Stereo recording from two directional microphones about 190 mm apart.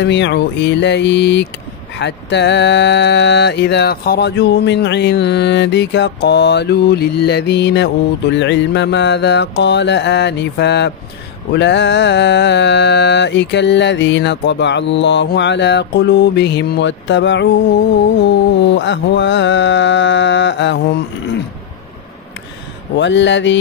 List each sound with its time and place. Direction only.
0.0 s mantra: 70° left (ahead or behind)
22.9 s mantra: 70° left (ahead or behind)